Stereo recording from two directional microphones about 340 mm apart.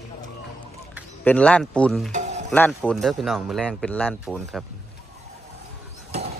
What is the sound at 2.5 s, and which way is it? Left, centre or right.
Speech, centre.